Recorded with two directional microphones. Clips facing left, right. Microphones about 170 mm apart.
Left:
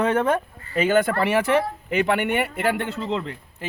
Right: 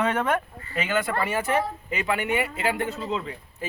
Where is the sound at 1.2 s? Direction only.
80° left.